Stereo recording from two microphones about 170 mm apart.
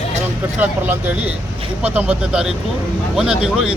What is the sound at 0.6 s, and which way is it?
Speech, 10° right (ahead or behind).